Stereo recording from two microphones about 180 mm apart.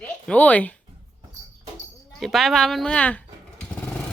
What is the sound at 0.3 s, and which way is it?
Speech, 10° left (ahead or behind).